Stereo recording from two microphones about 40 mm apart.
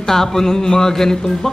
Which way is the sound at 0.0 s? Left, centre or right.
Centre.